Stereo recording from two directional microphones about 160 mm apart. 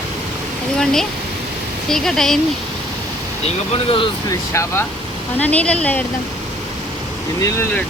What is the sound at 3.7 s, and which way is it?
Speech, 35° left (ahead or behind).